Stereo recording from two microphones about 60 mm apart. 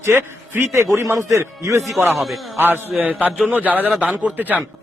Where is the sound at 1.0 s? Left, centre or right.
Right.